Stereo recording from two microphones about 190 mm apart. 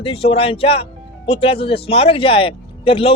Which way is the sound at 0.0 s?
30° left (ahead or behind).